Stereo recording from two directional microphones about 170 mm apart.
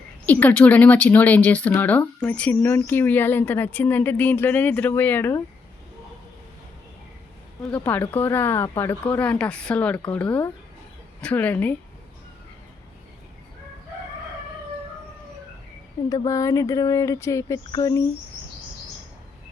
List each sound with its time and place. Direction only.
0.3 s speech: 10° left (ahead or behind)
7.7 s speech: 10° left (ahead or behind)
16.0 s speech: 20° left (ahead or behind)